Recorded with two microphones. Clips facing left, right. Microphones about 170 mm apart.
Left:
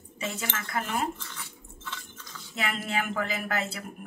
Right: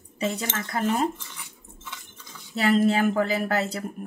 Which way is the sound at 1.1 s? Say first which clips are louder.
Left 1 dB; 15° right (ahead or behind).